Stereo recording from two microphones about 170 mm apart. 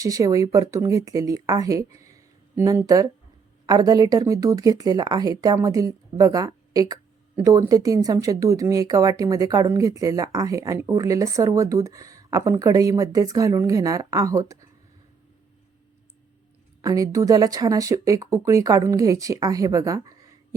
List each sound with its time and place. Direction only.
0.0 s speech: 20° right (ahead or behind)
16.8 s speech: 20° right (ahead or behind)